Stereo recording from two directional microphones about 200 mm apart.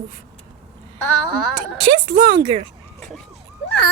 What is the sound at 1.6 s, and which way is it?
Speech, 25° right (ahead or behind).